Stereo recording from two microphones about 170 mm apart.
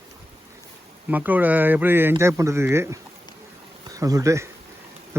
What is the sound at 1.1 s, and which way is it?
Speech, 10° right (ahead or behind).